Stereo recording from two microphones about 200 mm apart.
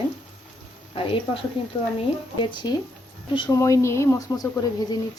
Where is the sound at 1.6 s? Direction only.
25° left (ahead or behind).